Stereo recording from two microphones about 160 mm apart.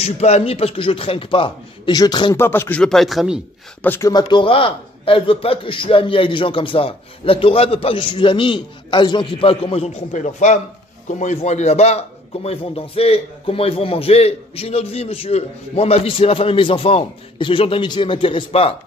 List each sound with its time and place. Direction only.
0.0 s a man's voice: 40° left (ahead or behind)
2.3 s speech: 15° left (ahead or behind); by 3.3 s centre (ahead or behind)
3.8 s speech: 15° left (ahead or behind)
4.1 s a man's voice: 25° left (ahead or behind)